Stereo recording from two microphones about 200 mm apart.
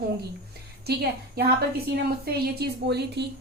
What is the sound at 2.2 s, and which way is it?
A woman's voice, 55° right (ahead or behind).